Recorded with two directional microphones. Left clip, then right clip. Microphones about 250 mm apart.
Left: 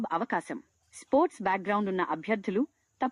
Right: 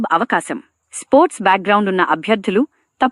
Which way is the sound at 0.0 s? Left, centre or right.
Right.